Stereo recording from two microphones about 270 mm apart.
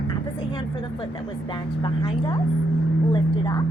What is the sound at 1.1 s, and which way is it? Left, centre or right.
Speech, centre.